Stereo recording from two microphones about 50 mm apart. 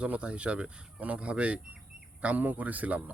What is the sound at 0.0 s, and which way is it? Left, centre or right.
Speech, right.